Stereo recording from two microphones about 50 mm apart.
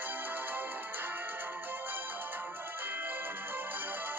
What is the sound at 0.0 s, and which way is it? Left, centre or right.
Music, right.